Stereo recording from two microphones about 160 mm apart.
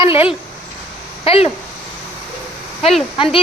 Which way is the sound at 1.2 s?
35° left (ahead or behind).